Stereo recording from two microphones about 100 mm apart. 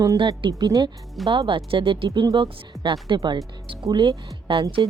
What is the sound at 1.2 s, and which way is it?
Speech, 60° right (ahead or behind).